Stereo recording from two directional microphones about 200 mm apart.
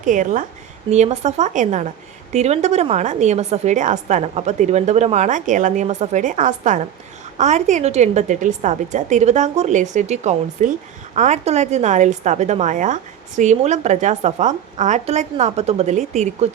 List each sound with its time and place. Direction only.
0.0 s a woman's voice: 40° right (ahead or behind)